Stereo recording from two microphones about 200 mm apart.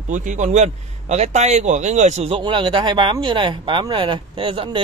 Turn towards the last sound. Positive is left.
turn(degrees=-25)  # may be behind; listen again after turning